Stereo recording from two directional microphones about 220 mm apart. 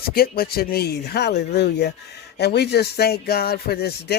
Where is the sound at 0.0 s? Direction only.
45° left (ahead or behind).